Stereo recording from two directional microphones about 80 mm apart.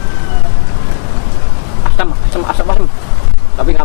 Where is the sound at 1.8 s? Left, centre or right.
Centre.